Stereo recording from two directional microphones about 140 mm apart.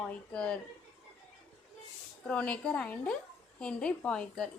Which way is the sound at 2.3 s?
10° left (ahead or behind).